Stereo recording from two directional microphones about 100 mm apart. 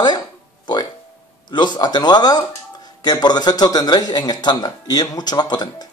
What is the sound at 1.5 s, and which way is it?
Speech, 45° left (ahead or behind).